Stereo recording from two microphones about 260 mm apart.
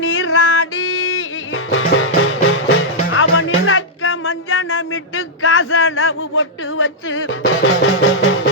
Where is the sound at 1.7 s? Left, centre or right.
Left.